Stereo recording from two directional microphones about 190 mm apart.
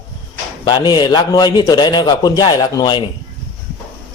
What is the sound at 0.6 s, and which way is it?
A man's voice, 25° left (ahead or behind).